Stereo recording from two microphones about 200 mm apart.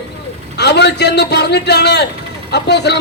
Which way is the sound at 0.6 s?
55° left (ahead or behind).